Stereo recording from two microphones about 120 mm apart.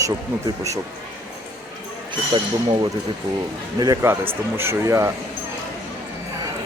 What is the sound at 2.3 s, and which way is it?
Speech, 45° right (ahead or behind).